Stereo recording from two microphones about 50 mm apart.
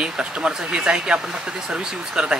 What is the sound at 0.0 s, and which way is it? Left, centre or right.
Speech, centre.